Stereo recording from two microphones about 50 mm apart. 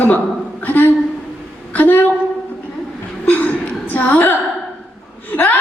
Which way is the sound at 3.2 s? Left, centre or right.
Left.